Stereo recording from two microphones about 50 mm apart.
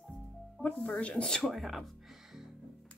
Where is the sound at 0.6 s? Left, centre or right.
Left.